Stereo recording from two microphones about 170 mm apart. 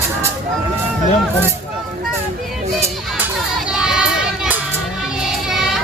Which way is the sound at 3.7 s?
5° right (ahead or behind).